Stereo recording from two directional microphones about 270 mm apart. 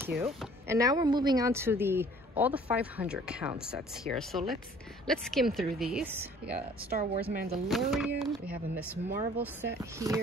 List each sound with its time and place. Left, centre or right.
0.0 s a woman's voice: centre
7.2 s speech: right
7.6 s a woman's voice: centre